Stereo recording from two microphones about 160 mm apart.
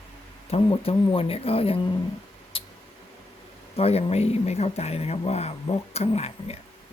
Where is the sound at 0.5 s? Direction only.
35° left (ahead or behind).